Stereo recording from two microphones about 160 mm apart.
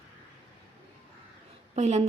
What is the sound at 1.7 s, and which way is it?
Speech, 45° right (ahead or behind).